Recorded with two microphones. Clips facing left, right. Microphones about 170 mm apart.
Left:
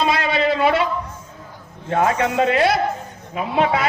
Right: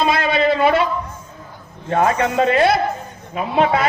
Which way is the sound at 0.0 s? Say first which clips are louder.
Right 2 dB; 45° right (ahead or behind).